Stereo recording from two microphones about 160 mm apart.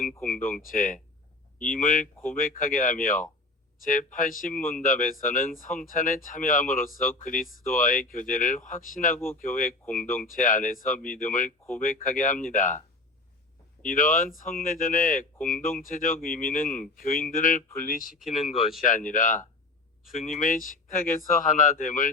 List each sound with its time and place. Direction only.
0.3 s speech: 55° left (ahead or behind)
13.8 s speech: 55° left (ahead or behind)
18.1 s speech: centre (ahead or behind)
18.8 s speech: 55° left (ahead or behind)